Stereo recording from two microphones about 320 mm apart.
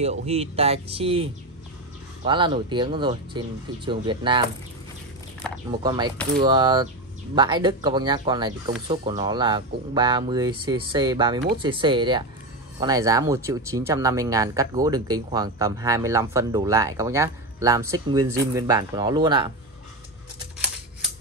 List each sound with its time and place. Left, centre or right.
0.0 s speech: centre
5.7 s speech: centre